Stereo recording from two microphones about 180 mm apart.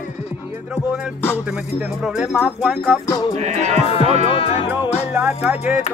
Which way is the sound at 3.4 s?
40° right (ahead or behind).